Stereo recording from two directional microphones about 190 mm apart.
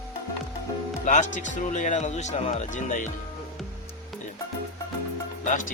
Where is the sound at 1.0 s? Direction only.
40° left (ahead or behind).